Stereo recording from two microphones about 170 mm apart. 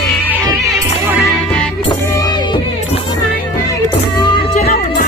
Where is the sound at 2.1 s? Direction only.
25° left (ahead or behind).